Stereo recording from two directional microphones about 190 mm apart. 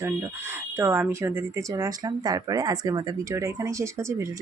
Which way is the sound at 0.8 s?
10° right (ahead or behind).